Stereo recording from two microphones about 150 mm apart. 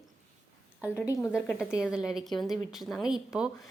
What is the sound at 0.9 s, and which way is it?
Speech, 20° left (ahead or behind).